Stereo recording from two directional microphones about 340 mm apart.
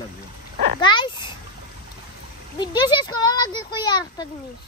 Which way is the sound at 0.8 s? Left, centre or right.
Centre.